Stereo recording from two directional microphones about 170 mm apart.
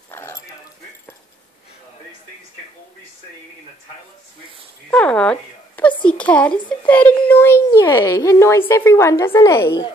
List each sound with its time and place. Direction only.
0.1 s dog: 15° left (ahead or behind)
4.9 s speech: 5° left (ahead or behind)